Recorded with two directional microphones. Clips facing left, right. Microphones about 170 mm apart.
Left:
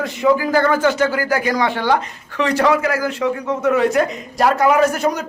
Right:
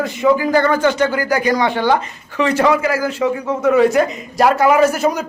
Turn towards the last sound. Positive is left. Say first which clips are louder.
# right 2 dB
turn(degrees=-5)  # may be behind; listen again after turning